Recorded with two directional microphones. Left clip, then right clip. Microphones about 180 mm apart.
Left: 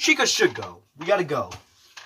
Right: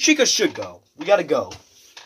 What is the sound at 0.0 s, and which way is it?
Speech, 55° right (ahead or behind).